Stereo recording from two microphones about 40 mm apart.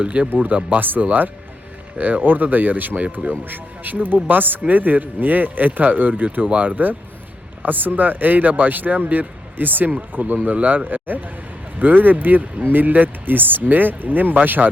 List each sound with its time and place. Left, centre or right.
0.0 s speech: right
0.3 s speech: right